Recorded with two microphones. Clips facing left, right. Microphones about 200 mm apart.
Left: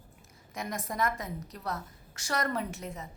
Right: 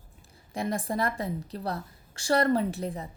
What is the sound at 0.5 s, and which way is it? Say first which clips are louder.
A woman's voice: right 6 dB; 30° right (ahead or behind).